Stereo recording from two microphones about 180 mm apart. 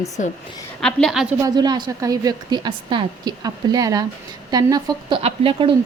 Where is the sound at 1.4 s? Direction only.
25° right (ahead or behind).